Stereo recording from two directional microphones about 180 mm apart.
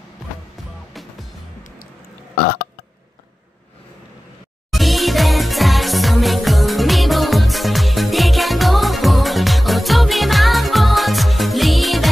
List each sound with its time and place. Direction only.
2.3 s burping: 60° left (ahead or behind)
4.7 s music: centre (ahead or behind)